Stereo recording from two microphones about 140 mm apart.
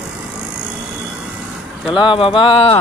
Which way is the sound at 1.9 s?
35° left (ahead or behind).